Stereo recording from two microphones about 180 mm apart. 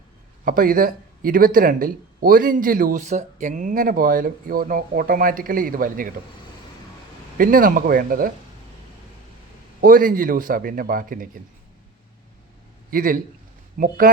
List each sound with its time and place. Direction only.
0.4 s speech: 50° right (ahead or behind)
7.3 s speech: 50° right (ahead or behind)
9.8 s speech: 50° right (ahead or behind)
12.9 s a man's voice: 50° right (ahead or behind)